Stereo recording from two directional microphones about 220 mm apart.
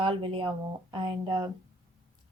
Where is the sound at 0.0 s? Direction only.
25° right (ahead or behind).